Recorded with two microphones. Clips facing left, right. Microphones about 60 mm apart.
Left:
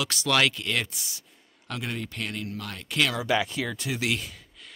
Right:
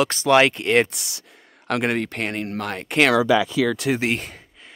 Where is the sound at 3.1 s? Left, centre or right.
Right.